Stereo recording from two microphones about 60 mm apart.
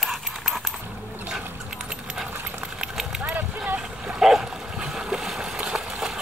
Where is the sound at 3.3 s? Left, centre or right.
Right.